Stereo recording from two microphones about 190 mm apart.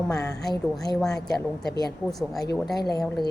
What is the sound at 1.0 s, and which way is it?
Speech, 5° left (ahead or behind).